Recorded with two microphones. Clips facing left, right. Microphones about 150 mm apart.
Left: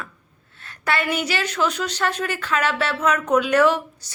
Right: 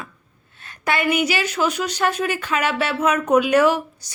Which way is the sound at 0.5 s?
15° right (ahead or behind).